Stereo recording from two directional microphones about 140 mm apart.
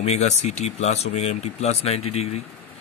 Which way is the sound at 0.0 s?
50° left (ahead or behind).